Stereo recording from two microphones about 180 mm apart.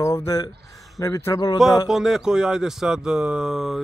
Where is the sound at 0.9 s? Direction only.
15° left (ahead or behind).